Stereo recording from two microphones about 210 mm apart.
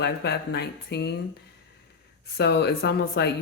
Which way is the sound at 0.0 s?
50° left (ahead or behind).